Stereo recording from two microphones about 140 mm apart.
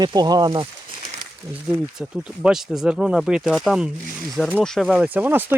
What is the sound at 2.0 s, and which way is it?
Speech, 5° right (ahead or behind).